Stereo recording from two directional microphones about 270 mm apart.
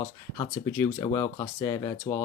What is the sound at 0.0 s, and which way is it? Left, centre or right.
Speech, centre.